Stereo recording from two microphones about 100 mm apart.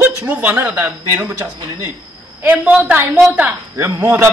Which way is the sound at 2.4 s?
15° right (ahead or behind).